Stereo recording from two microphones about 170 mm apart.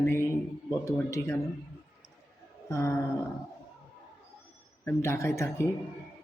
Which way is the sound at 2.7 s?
15° left (ahead or behind).